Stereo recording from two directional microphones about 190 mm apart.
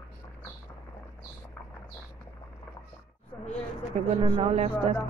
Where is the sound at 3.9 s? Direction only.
30° right (ahead or behind).